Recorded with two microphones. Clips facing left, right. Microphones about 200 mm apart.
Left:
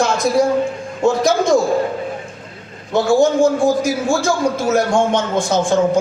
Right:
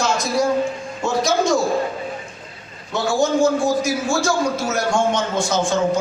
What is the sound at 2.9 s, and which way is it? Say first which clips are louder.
A man's voice: left 5 dB; 55° left (ahead or behind).